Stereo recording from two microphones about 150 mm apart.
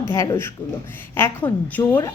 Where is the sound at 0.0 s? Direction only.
20° left (ahead or behind).